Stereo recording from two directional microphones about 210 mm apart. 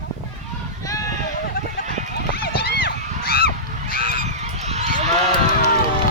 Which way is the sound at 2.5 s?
45° left (ahead or behind).